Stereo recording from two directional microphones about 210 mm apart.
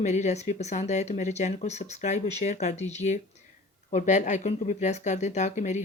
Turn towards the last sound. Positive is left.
turn(degrees=35)  # may be behind; listen again after turning